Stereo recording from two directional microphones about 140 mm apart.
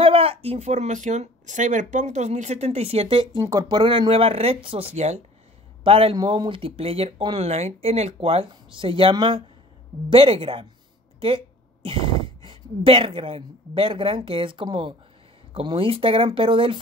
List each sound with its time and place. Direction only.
0.0 s speech: 40° right (ahead or behind)
3.3 s speech: 25° right (ahead or behind); by 5.2 s 50° right (ahead or behind)
5.9 s a woman's voice: 40° right (ahead or behind)